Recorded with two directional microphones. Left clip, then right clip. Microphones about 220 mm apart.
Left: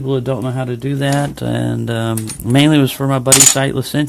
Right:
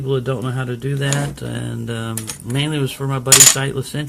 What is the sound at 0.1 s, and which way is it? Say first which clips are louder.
Speech: left 3 dB; 30° left (ahead or behind).